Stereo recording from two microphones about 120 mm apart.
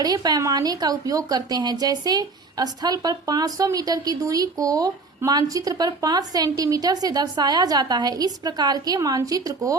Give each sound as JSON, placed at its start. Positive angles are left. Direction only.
{"t": 0.0, "sound": "a woman's voice", "side_deg": -35}